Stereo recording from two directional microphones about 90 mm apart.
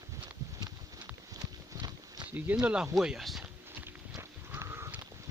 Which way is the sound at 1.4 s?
50° right (ahead or behind).